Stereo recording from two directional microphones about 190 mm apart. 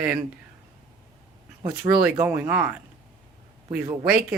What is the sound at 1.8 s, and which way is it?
Speech, 15° right (ahead or behind).